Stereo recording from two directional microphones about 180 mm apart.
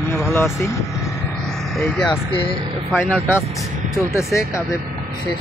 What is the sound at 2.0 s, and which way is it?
Speech, 30° left (ahead or behind).